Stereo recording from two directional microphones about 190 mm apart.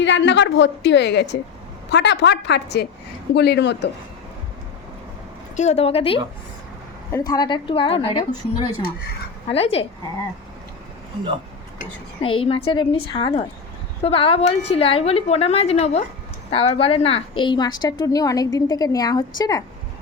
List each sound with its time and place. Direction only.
0.0 s a woman's voice: 70° left (ahead or behind)
5.5 s a woman's voice: 35° left (ahead or behind)
12.2 s a woman's voice: 30° left (ahead or behind)